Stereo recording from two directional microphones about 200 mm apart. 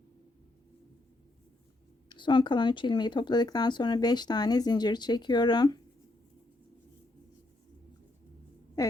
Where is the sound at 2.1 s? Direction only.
25° left (ahead or behind).